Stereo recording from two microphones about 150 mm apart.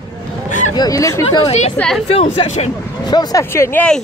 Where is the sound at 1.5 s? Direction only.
45° left (ahead or behind).